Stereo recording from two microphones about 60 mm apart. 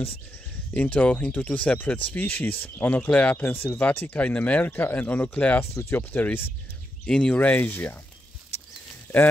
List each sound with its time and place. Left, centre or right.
0.7 s speech: left
5.6 s speech: left
7.1 s speech: centre
7.3 s speech: left